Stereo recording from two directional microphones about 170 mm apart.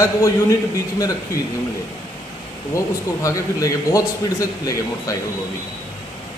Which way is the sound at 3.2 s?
20° left (ahead or behind).